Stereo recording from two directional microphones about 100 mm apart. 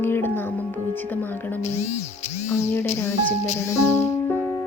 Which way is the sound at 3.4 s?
30° left (ahead or behind).